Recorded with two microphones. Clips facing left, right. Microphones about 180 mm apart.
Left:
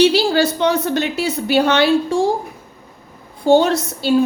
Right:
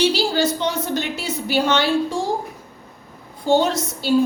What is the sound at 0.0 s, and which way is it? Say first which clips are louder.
A woman's voice: left 5 dB; 65° left (ahead or behind).